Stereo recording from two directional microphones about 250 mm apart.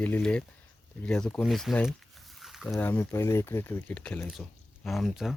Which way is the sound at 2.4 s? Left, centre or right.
Centre.